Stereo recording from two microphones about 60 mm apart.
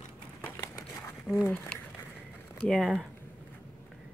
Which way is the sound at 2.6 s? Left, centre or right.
Centre.